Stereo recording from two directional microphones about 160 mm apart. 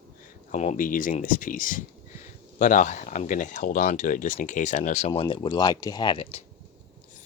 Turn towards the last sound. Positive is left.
turn(degrees=35)  # may be behind; listen again after turning